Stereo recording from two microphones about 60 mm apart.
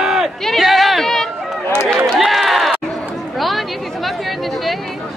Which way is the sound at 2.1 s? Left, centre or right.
Centre.